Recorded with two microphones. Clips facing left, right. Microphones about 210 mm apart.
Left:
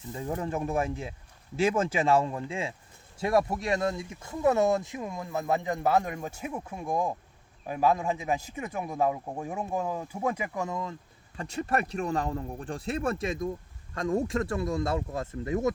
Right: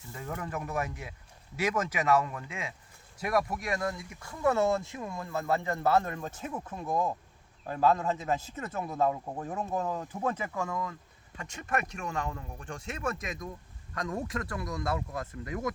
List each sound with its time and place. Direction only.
0.1 s speech: 25° left (ahead or behind)